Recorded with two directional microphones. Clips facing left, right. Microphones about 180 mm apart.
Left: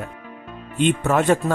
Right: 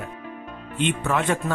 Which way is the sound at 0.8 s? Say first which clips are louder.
Left 5 dB; 40° left (ahead or behind).